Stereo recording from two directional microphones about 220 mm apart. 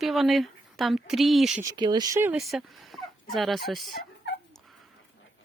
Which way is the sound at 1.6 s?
15° right (ahead or behind).